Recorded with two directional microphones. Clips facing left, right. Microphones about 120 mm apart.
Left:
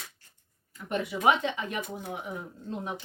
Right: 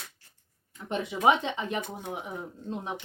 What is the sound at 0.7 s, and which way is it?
Speech, 20° right (ahead or behind).